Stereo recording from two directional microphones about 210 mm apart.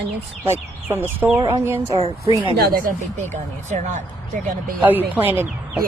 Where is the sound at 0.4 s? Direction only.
10° right (ahead or behind).